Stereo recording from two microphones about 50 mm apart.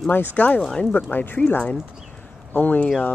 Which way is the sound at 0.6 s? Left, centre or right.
Centre.